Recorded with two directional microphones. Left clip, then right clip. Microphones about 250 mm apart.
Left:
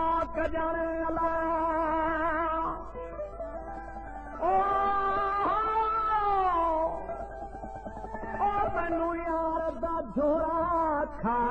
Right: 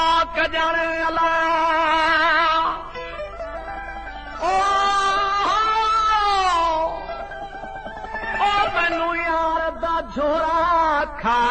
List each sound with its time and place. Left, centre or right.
0.0 s a sound: right
0.8 s music: right
4.5 s music: right
6.7 s music: right
8.3 s music: right
9.1 s music: right